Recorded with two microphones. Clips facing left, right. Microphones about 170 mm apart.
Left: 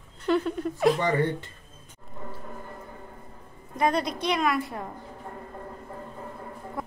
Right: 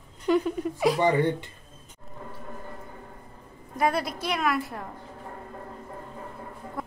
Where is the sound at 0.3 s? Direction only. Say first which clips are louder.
Right 1 dB; 10° right (ahead or behind).